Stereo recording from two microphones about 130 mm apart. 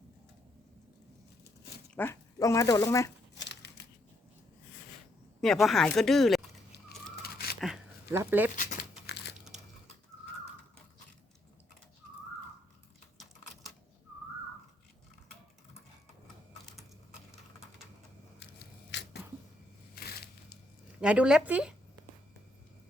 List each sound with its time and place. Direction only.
2.0 s speech: 20° left (ahead or behind)
5.4 s speech: centre (ahead or behind)
8.1 s speech: 15° right (ahead or behind)
8.5 s crumpling: 85° left
9.0 s a sound: 5° right (ahead or behind)
13.1 s typewriter: centre (ahead or behind)
21.0 s speech: 10° right (ahead or behind)